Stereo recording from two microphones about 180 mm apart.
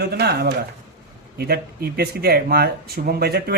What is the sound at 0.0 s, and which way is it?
Speech, 65° right (ahead or behind).